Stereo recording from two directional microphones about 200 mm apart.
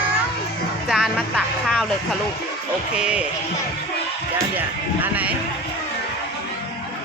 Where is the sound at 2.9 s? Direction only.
5° right (ahead or behind).